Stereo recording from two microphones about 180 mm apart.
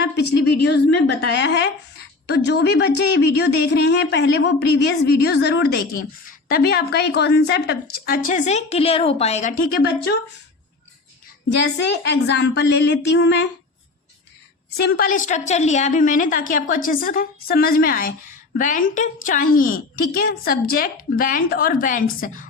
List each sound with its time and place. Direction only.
0.0 s a woman's voice: 65° left (ahead or behind); by 9.7 s 40° left (ahead or behind)
9.8 s speech: 65° left (ahead or behind)
11.6 s a woman's voice: 70° left (ahead or behind)
14.8 s a woman's voice: 60° left (ahead or behind)